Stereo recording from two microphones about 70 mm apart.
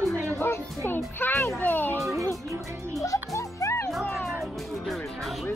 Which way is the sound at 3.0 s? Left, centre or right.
Left.